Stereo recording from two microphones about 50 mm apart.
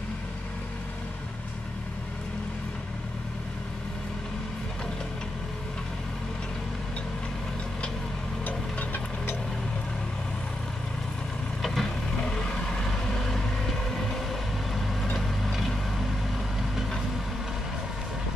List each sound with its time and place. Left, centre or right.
8.5 s vehicle: left
11.6 s vehicle: centre
12.2 s vehicle: centre
15.1 s a sound: centre